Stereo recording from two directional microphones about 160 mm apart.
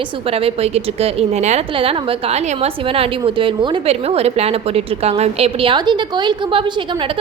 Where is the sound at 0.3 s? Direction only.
35° right (ahead or behind).